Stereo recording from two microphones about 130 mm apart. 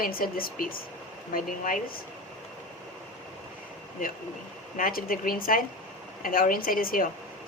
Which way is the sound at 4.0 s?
90° left.